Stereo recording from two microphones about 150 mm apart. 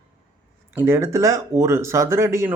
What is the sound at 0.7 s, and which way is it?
Speech, 15° right (ahead or behind).